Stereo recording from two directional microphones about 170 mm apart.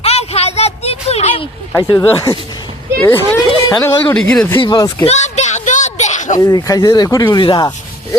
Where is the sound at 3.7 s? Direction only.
25° left (ahead or behind).